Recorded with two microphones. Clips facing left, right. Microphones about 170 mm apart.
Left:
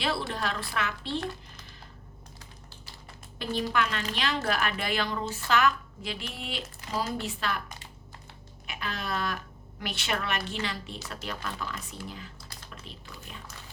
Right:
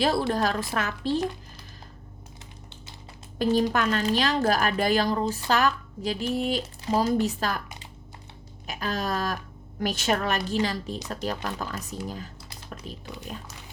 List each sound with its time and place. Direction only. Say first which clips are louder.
0.0 s speech: right 7 dB; 40° right (ahead or behind)
3.3 s a woman's voice: right 6 dB; 40° right (ahead or behind)
8.6 s speech: right 6 dB; 40° right (ahead or behind)